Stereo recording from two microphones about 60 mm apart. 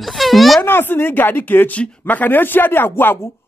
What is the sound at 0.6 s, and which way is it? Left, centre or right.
Speech, left.